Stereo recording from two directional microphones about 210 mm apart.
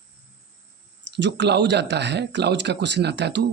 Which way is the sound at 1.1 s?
55° right (ahead or behind).